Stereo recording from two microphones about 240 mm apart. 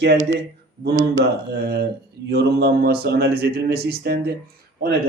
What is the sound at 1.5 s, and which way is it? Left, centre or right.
Speech, right.